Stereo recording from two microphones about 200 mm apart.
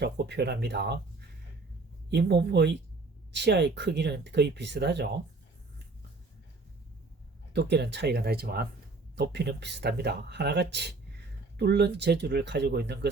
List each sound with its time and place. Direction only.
0.0 s speech: 55° right (ahead or behind)
2.0 s speech: 55° right (ahead or behind)
7.5 s speech: 55° right (ahead or behind)